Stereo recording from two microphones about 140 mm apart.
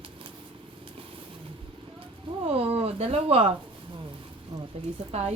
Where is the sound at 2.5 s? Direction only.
45° right (ahead or behind).